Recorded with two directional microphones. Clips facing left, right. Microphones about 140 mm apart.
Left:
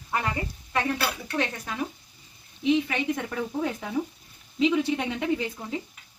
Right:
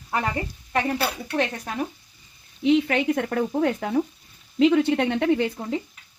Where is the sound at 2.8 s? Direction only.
60° right (ahead or behind).